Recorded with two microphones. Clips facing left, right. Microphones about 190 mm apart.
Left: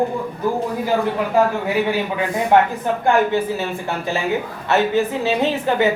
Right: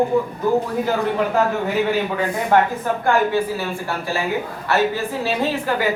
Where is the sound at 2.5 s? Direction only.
20° left (ahead or behind).